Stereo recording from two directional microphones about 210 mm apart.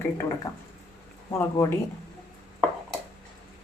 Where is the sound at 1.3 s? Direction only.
15° left (ahead or behind).